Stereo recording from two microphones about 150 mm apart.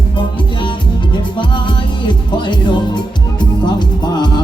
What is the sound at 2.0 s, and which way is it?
Music, 30° left (ahead or behind).